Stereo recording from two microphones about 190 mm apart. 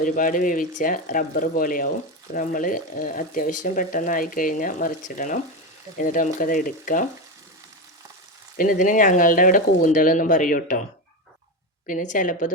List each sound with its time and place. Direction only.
0.0 s speech: 45° left (ahead or behind)
8.5 s speech: 45° left (ahead or behind)
11.9 s speech: 45° left (ahead or behind)